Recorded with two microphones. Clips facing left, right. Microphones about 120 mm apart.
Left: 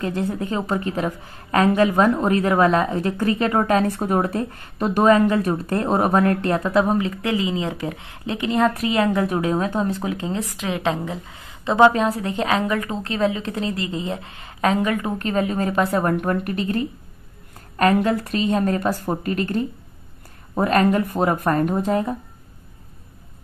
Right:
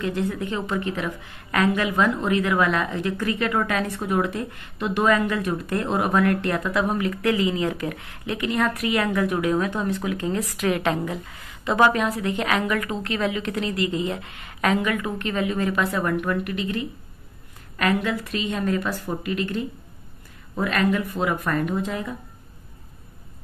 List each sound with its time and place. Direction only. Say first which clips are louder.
0.0 s a woman's voice: left 1 dB; 35° left (ahead or behind)